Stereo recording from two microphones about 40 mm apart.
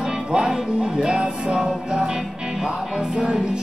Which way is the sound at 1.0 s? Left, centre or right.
Right.